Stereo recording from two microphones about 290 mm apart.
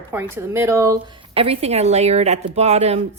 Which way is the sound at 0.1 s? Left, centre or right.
Centre.